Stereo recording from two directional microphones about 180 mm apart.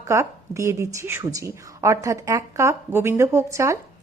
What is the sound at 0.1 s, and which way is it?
A woman's voice, 15° right (ahead or behind).